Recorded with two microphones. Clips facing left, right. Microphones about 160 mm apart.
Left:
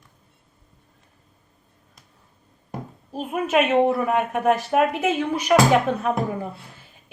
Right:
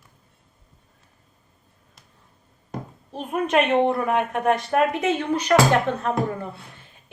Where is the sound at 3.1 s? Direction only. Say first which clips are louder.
Even; 5° left (ahead or behind).